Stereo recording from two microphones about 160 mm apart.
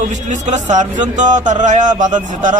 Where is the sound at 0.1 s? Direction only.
50° right (ahead or behind).